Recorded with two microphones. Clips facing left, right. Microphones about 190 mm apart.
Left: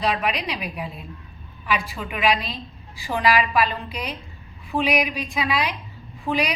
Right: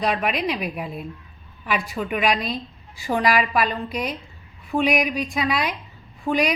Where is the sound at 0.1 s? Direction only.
50° right (ahead or behind).